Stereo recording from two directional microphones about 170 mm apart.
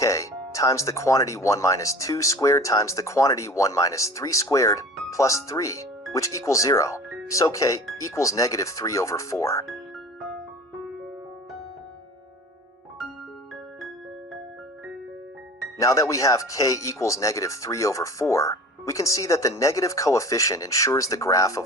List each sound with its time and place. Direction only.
0.0 s speech: 20° left (ahead or behind)
15.8 s speech: 20° left (ahead or behind)